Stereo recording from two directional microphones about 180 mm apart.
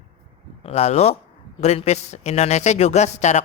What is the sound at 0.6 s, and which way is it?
A man's voice, 35° left (ahead or behind).